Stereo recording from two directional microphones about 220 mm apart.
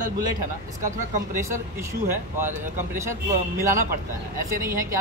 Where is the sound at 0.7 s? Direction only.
35° right (ahead or behind).